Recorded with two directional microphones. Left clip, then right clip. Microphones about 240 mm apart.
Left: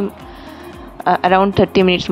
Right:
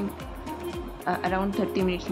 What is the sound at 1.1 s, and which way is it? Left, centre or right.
Speech, left.